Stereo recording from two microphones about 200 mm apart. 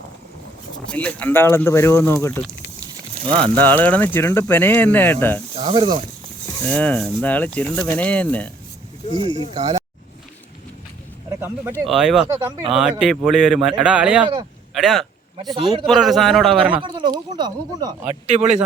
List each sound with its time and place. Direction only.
0.9 s speech: 5° left (ahead or behind)
5.5 s speech: 25° right (ahead or behind)
6.7 s speech: 5° left (ahead or behind)
9.0 s speech: 25° left (ahead or behind)
9.6 s speech: 20° right (ahead or behind)
11.3 s speech: 10° right (ahead or behind)
12.3 s speech: 15° right (ahead or behind)
12.7 s speech: 5° right (ahead or behind)
15.4 s speech: 25° right (ahead or behind)
15.9 s speech: centre (ahead or behind)
16.7 s speech: 25° right (ahead or behind)
18.1 s speech: 35° right (ahead or behind)